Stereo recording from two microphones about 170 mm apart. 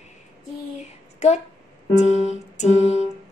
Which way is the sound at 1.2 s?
40° left (ahead or behind).